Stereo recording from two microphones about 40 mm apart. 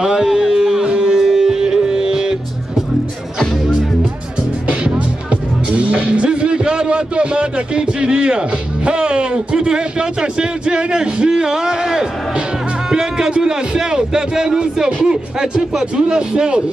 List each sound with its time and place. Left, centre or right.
0.0 s music: centre
1.2 s music: centre
4.6 s a man's voice: right